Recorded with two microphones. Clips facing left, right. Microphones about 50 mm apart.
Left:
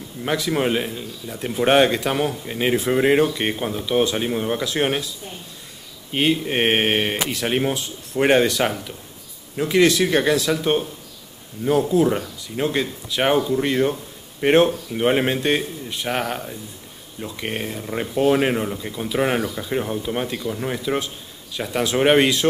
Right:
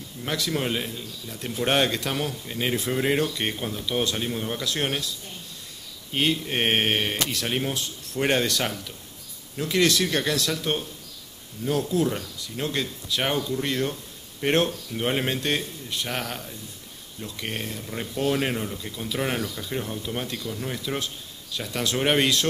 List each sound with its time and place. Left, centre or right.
0.2 s speech: centre